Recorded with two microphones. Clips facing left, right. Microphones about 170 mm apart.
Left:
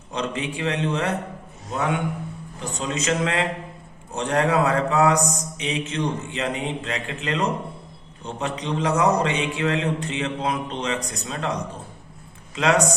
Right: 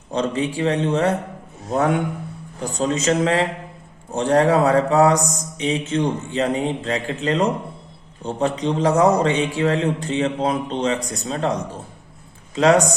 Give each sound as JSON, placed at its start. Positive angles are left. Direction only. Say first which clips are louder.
{"t": 0.1, "sound": "a man's voice", "louder": "right 6 dB", "side_deg": -30}